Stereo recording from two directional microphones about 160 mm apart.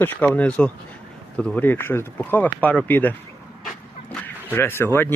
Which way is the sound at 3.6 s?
10° left (ahead or behind).